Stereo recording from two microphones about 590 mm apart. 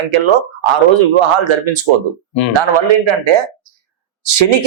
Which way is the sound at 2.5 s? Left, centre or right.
Right.